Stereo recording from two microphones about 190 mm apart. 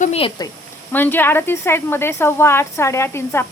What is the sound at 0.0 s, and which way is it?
Speech, 30° left (ahead or behind).